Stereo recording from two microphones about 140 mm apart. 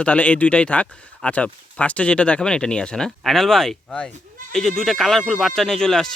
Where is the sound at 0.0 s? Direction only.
10° left (ahead or behind).